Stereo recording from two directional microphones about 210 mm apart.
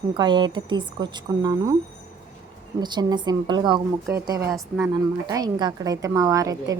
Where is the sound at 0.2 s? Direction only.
20° right (ahead or behind).